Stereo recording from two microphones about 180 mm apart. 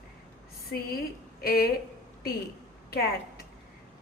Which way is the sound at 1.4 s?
55° left (ahead or behind).